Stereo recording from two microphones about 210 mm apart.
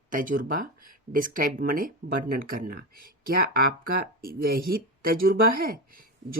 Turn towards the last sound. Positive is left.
turn(degrees=-45)  # may be behind; listen again after turning